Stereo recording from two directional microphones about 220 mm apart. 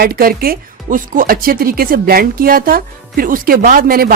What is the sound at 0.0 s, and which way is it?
Speech, 45° right (ahead or behind).